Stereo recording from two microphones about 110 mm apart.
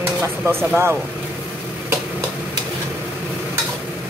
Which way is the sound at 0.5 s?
20° right (ahead or behind).